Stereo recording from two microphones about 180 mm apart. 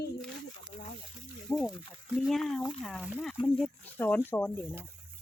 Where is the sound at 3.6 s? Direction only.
10° left (ahead or behind).